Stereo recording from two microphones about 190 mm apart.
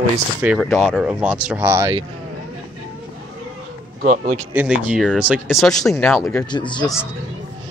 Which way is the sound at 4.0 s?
45° right (ahead or behind).